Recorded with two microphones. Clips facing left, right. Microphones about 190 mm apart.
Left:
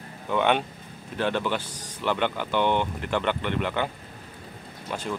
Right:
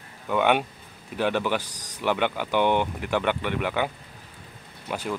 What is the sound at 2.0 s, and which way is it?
Speech, 10° right (ahead or behind).